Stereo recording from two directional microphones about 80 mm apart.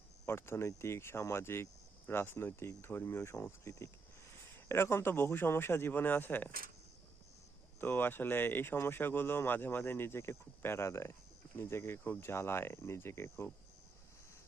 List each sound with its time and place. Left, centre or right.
0.3 s speech: left
7.8 s speech: left